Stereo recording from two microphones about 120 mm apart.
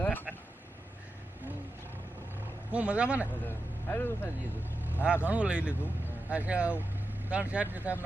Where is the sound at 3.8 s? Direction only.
15° left (ahead or behind).